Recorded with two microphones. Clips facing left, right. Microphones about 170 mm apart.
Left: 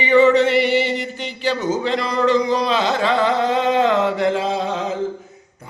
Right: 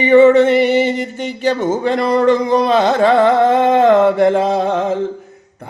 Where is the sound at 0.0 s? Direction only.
50° right (ahead or behind).